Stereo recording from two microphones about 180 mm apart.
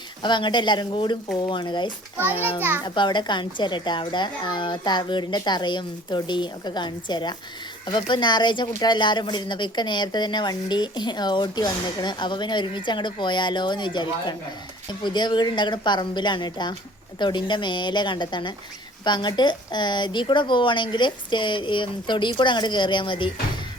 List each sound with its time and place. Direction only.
0.2 s a child's voice: 25° left (ahead or behind)
2.6 s a child's voice: 10° right (ahead or behind)
2.8 s speech: 25° left (ahead or behind)